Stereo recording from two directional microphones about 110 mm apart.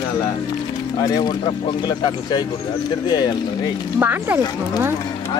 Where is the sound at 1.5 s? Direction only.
45° left (ahead or behind).